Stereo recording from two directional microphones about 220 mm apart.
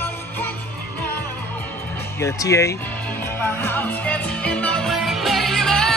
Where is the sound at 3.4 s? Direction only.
10° left (ahead or behind).